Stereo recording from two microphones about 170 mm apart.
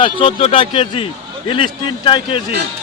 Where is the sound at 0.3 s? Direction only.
35° left (ahead or behind).